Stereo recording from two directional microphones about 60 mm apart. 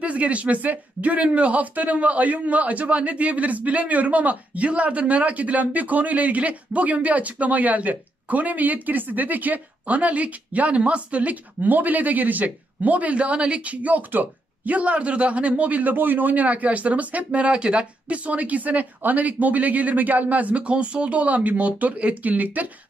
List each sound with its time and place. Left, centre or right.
0.0 s speech: right